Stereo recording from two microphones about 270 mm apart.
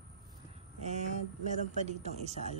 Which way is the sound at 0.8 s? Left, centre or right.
Right.